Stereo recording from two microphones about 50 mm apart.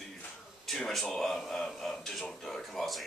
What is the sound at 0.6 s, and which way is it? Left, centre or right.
Speech, centre.